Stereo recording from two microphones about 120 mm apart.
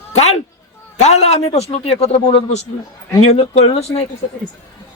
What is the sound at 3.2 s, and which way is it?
Speech, 60° left (ahead or behind).